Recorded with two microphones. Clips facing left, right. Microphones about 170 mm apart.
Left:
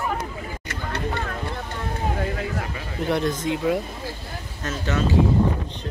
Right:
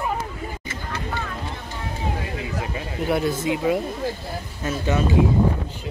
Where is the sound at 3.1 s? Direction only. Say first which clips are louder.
Right 1 dB; 5° right (ahead or behind).